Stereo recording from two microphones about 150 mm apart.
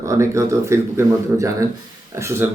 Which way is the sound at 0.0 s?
20° right (ahead or behind).